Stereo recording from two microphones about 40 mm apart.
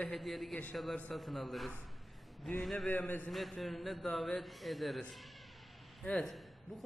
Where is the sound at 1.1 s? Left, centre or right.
Centre.